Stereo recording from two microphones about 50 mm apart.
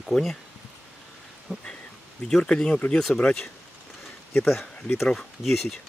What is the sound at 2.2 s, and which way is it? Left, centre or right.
Speech, centre.